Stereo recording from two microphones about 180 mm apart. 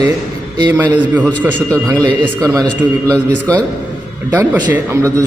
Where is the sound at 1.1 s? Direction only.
10° right (ahead or behind).